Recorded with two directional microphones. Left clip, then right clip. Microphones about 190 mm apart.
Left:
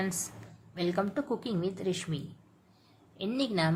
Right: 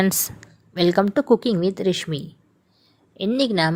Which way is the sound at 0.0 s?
40° right (ahead or behind).